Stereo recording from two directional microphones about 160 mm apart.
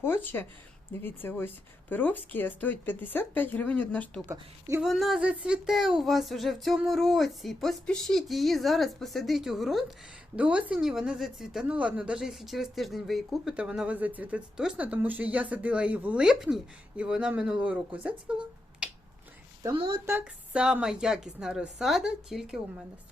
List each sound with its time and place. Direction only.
0.0 s a woman's voice: 10° left (ahead or behind); by 18.9 s 5° right (ahead or behind)
19.7 s a woman's voice: 35° right (ahead or behind)
20.1 s speech: 10° right (ahead or behind)